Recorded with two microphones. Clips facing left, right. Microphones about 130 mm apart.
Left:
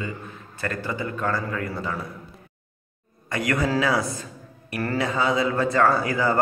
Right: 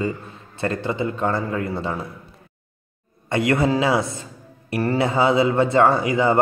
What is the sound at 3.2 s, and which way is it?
A man's voice, 25° right (ahead or behind).